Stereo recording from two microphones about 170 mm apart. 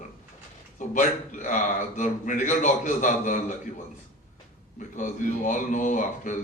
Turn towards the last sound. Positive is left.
turn(degrees=50)  # may be behind; listen again after turning